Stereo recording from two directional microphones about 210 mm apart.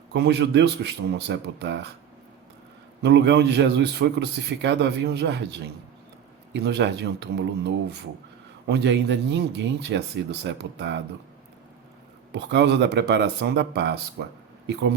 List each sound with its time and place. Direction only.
0.1 s a man's voice: 55° right (ahead or behind)
3.0 s a man's voice: 55° right (ahead or behind)
12.3 s a man's voice: 55° right (ahead or behind)